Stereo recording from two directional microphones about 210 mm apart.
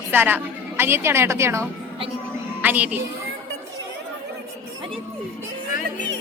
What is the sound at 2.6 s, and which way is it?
Speech, 5° right (ahead or behind).